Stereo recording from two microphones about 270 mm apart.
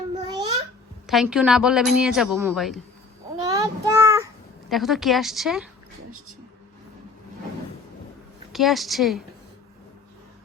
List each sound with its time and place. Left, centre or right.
0.1 s babbling: centre
1.0 s a woman's voice: centre
3.4 s child singing: centre
4.7 s a woman's voice: centre
8.5 s a woman's voice: centre